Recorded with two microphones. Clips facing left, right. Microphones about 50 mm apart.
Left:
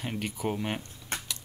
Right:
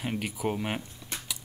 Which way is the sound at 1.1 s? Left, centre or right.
Left.